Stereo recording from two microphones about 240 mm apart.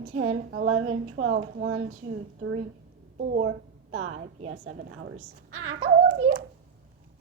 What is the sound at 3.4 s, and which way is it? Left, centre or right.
A child's voice, right.